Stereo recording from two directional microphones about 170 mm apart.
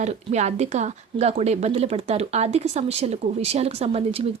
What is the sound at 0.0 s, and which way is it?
Speech, 45° right (ahead or behind).